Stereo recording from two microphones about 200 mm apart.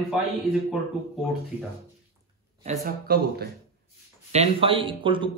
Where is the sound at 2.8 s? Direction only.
50° right (ahead or behind).